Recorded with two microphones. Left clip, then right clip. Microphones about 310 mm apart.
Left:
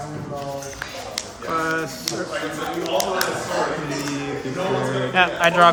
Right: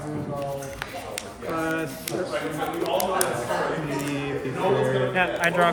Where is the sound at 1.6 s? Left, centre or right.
Centre.